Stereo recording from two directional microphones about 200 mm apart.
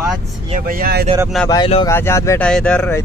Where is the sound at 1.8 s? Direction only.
15° left (ahead or behind).